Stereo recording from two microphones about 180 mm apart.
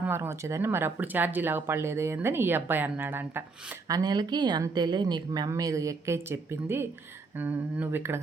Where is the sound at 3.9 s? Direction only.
20° right (ahead or behind).